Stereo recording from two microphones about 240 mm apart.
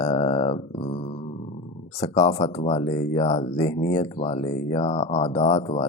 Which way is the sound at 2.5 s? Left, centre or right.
Left.